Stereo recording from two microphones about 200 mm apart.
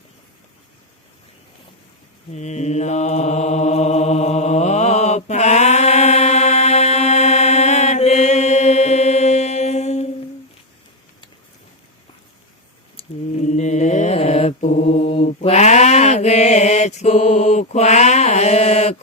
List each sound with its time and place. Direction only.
2.3 s mantra: 35° left (ahead or behind)
13.0 s mantra: 35° left (ahead or behind)